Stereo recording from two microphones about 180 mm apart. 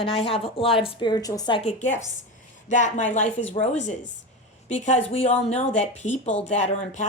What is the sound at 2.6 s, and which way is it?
A woman's voice, 45° left (ahead or behind).